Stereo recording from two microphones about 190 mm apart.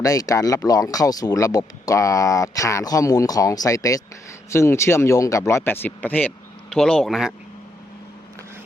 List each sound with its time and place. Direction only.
0.0 s speech: 20° left (ahead or behind); by 7.3 s centre (ahead or behind)